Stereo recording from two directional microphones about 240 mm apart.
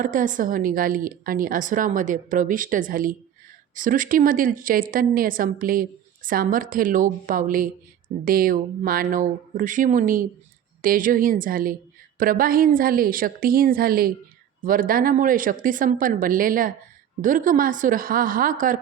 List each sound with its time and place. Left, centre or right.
0.0 s a woman's voice: right